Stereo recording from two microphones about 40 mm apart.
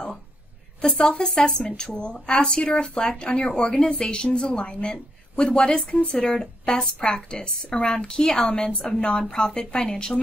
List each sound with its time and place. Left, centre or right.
0.8 s speech: centre
1.6 s speech: left